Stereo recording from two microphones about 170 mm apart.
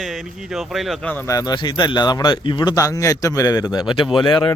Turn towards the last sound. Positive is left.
turn(degrees=30)  # may be behind; listen again after turning